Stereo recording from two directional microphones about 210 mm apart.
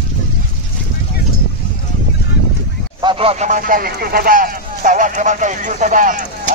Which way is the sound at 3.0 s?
25° right (ahead or behind).